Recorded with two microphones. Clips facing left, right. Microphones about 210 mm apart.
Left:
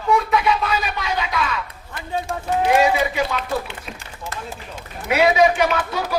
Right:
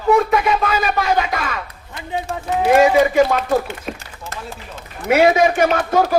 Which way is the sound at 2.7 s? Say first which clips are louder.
Right 9 dB; 50° right (ahead or behind).